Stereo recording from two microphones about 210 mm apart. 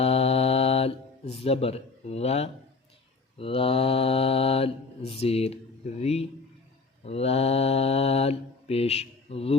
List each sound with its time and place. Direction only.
0.0 s mantra: 30° left (ahead or behind)